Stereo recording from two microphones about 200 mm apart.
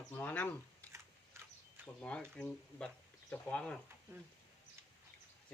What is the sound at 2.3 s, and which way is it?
Speech, 5° left (ahead or behind).